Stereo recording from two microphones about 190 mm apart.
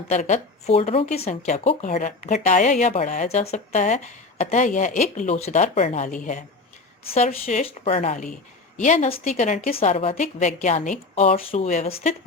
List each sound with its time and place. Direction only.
0.1 s a woman's voice: 40° left (ahead or behind)
7.1 s a woman's voice: 35° left (ahead or behind)